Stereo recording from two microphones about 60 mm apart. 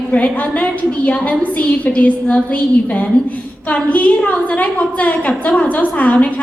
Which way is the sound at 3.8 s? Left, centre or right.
Left.